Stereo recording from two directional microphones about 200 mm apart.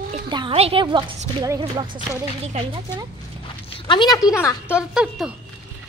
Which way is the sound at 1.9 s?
35° right (ahead or behind).